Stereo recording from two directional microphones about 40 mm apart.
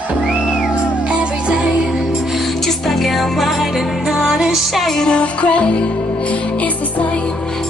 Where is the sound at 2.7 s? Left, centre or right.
Centre.